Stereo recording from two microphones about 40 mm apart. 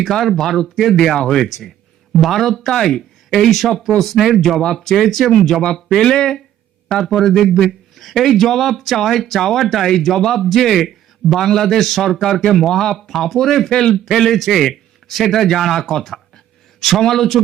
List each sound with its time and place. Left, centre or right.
0.0 s speech: centre
7.3 s speech: centre
7.5 s speech: centre
13.9 s speech: centre